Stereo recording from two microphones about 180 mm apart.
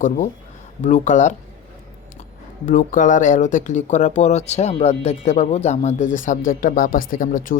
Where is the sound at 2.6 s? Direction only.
50° left (ahead or behind).